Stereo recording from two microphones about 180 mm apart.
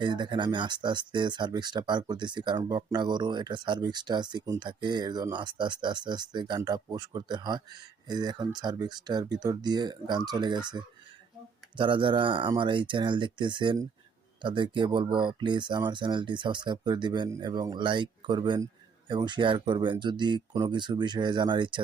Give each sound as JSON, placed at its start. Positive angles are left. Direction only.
{"t": 0.0, "sound": "speech", "side_deg": -25}